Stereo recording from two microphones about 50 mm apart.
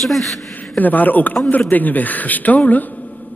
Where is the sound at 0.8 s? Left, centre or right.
Left.